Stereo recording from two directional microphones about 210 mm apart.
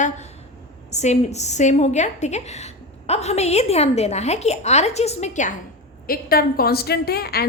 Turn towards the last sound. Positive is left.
turn(degrees=50)  # may be behind; listen again after turning